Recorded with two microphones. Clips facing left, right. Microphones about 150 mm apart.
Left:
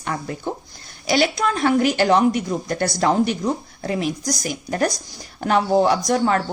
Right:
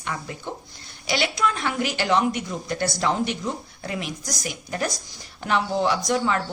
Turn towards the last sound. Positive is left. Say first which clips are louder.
# left 4 dB
turn(degrees=45)  # may be behind; listen again after turning